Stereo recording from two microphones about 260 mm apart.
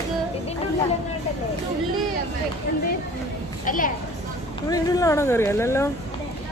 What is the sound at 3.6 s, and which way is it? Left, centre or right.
Speech, left.